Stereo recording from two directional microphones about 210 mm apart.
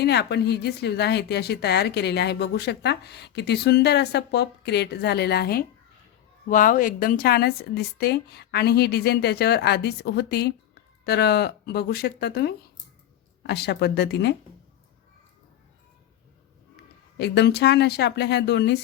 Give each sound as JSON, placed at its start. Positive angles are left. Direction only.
{"t": 0.0, "sound": "a woman's voice", "side_deg": 50}
{"t": 17.2, "sound": "a woman's voice", "side_deg": 50}